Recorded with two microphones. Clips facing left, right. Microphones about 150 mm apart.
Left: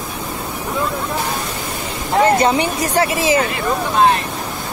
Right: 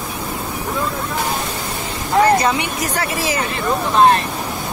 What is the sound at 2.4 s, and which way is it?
Speech, 30° left (ahead or behind).